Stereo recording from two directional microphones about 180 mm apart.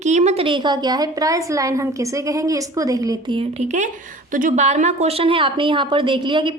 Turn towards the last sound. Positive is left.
turn(degrees=-25)  # may be behind; listen again after turning